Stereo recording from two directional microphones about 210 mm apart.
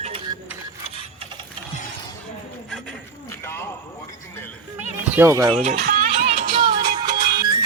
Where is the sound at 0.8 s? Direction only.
25° right (ahead or behind).